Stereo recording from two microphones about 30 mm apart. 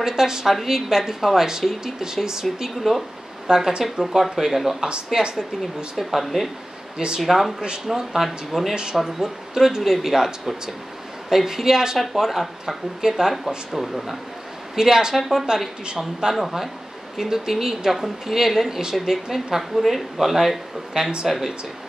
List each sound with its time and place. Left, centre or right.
0.0 s speech: centre
2.6 s speech: centre
3.4 s speech: right
4.0 s speech: centre
5.1 s speech: centre
6.2 s speech: centre
14.8 s speech: centre
15.1 s speech: centre
16.3 s speech: centre
21.0 s speech: right
21.3 s speech: centre